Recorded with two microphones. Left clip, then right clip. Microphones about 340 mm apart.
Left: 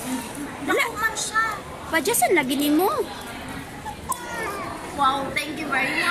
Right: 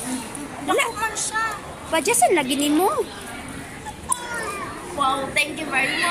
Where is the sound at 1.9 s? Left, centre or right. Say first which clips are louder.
Right 2 dB; centre.